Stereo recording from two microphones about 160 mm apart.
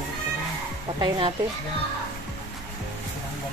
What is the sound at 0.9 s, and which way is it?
Speech, 25° right (ahead or behind).